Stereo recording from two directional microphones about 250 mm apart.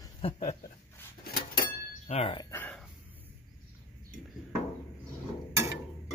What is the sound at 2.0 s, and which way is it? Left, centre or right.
Speech, left.